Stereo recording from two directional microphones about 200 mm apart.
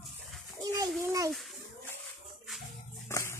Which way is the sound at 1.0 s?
15° right (ahead or behind).